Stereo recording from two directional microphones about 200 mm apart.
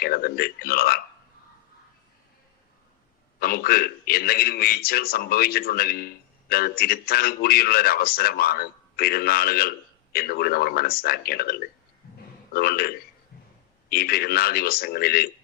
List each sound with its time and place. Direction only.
0.0 s a man's voice: 50° left (ahead or behind)
3.4 s a man's voice: 50° left (ahead or behind)
12.5 s a man's voice: 50° left (ahead or behind)
13.9 s a man's voice: 50° left (ahead or behind)